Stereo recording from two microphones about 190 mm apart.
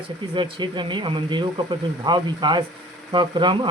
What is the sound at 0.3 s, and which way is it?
Speech, 25° right (ahead or behind).